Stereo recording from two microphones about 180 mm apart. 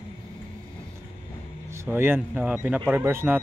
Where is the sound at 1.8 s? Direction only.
10° right (ahead or behind).